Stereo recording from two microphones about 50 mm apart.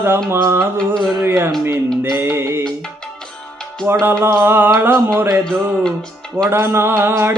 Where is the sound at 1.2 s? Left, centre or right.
Right.